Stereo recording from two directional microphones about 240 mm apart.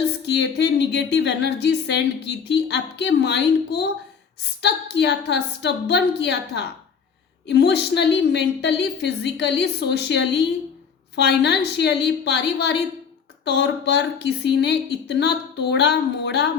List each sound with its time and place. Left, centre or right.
0.3 s speech: left